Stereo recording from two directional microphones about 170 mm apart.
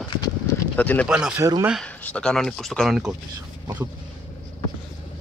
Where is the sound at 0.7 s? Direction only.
10° left (ahead or behind).